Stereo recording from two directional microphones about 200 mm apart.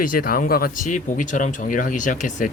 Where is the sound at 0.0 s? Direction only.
45° left (ahead or behind).